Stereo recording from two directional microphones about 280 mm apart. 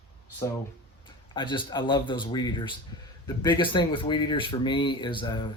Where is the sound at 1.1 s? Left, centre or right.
Centre.